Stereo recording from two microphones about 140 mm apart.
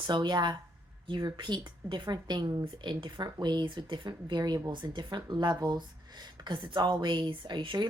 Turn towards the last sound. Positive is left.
turn(degrees=-35)  # may be behind; listen again after turning